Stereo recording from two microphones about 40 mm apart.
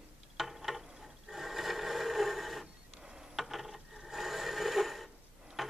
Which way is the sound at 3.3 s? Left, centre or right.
Centre.